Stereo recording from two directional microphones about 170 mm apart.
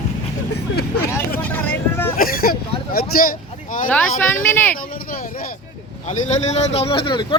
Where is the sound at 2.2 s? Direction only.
55° left (ahead or behind).